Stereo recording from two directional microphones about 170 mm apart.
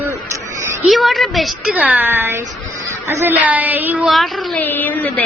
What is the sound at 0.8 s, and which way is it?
A woman's voice, centre (ahead or behind).